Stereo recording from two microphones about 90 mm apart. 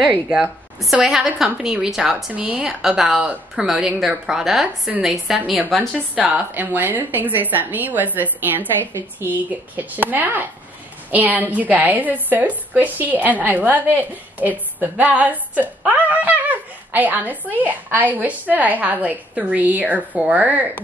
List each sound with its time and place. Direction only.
0.3 s a woman's voice: 5° right (ahead or behind)
6.5 s a woman's voice: 20° right (ahead or behind)